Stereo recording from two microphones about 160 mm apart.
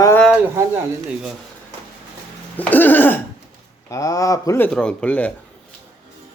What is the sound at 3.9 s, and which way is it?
Speech, 20° left (ahead or behind).